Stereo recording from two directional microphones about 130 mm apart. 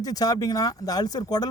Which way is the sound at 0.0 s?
30° left (ahead or behind).